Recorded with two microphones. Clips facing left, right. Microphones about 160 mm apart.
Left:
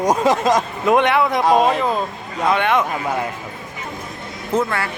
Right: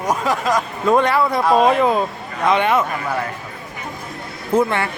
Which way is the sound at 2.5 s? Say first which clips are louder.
Right 1 dB; 10° right (ahead or behind).